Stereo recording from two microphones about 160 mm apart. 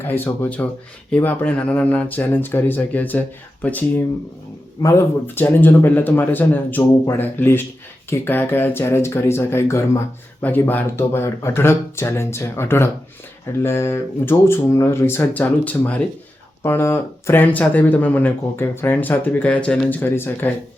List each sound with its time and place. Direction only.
0.0 s speech: 15° left (ahead or behind)